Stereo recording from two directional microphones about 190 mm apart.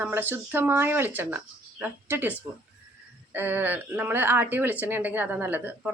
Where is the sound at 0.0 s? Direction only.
10° right (ahead or behind).